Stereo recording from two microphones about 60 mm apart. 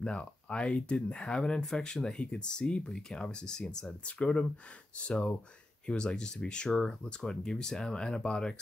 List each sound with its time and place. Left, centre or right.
0.0 s speech: centre